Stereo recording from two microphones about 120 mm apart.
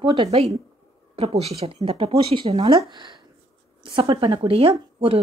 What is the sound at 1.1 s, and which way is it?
Speech, 55° right (ahead or behind).